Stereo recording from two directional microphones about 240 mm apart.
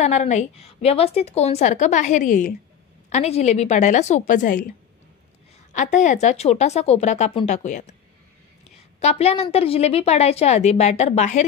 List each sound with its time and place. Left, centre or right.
0.0 s a woman's voice: left